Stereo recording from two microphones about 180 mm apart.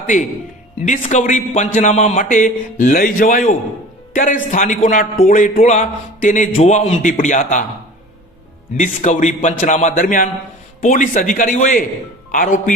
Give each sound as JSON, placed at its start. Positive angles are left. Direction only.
{"t": 0.9, "sound": "a man's voice", "side_deg": 45}
{"t": 8.7, "sound": "a man's voice", "side_deg": 45}